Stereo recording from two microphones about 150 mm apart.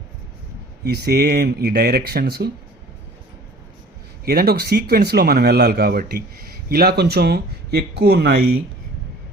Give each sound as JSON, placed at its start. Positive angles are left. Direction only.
{"t": 0.9, "sound": "speech", "side_deg": -90}
{"t": 4.3, "sound": "speech", "side_deg": -90}